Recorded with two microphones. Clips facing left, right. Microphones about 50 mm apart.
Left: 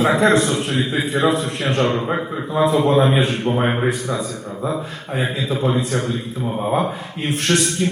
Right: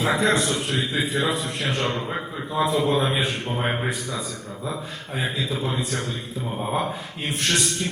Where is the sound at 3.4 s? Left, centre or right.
Left.